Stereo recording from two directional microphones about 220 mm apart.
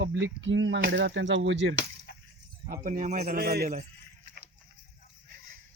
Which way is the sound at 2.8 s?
35° right (ahead or behind).